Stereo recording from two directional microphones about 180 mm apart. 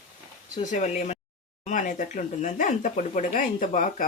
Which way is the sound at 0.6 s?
45° left (ahead or behind).